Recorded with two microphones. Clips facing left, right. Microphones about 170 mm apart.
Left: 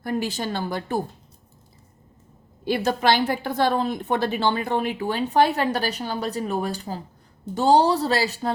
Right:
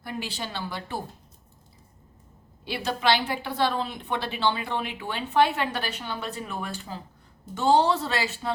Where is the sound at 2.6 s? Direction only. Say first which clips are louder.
Left 5 dB; 45° left (ahead or behind).